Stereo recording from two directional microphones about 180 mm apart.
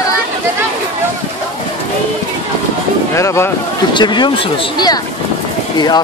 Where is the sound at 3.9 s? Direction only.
25° left (ahead or behind).